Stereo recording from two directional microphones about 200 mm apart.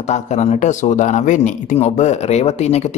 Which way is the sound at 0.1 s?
35° left (ahead or behind).